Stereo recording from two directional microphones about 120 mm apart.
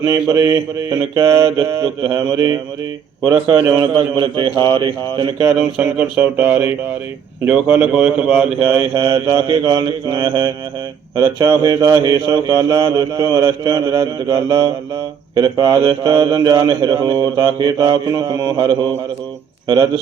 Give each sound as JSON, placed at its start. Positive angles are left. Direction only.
{"t": 0.0, "sound": "speech", "side_deg": -30}
{"t": 5.5, "sound": "a sound", "side_deg": -10}
{"t": 8.6, "sound": "speech", "side_deg": -35}